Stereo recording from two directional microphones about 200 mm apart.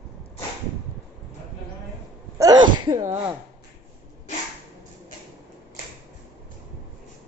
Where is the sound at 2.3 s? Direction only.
20° right (ahead or behind).